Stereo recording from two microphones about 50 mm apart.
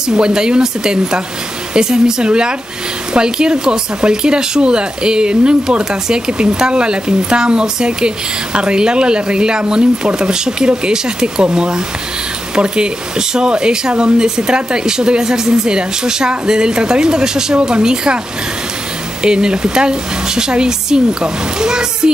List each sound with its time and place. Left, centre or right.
0.1 s speech: centre
19.2 s speech: centre